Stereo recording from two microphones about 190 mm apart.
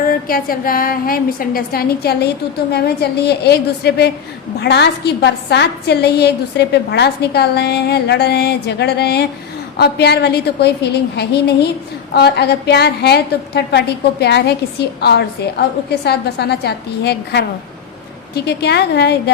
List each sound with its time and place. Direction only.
0.1 s a woman's voice: 50° left (ahead or behind)